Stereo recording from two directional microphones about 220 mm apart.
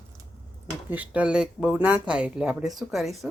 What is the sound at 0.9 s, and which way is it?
Speech, 5° right (ahead or behind).